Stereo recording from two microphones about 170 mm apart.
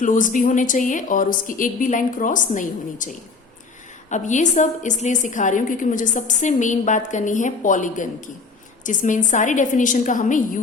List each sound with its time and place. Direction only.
0.0 s a woman's voice: 50° left (ahead or behind)
4.1 s a woman's voice: 45° left (ahead or behind)